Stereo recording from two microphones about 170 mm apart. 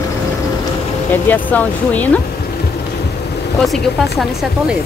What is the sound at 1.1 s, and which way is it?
Speech, 10° left (ahead or behind).